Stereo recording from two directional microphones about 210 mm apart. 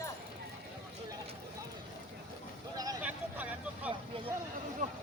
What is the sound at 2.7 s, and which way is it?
Vehicle, 15° right (ahead or behind).